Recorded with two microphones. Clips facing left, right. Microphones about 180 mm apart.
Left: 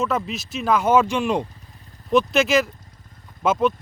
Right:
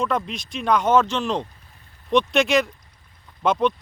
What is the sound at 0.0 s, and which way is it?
Speech, 5° left (ahead or behind).